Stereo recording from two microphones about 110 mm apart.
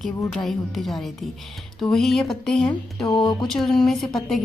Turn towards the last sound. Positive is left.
turn(degrees=5)  # may be behind; listen again after turning